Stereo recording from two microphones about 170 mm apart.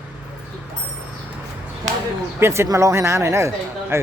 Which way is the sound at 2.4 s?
15° right (ahead or behind).